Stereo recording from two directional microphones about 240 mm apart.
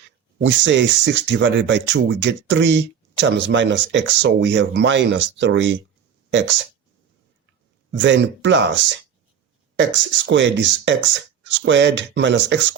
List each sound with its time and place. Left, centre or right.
0.3 s speech: right
7.9 s speech: right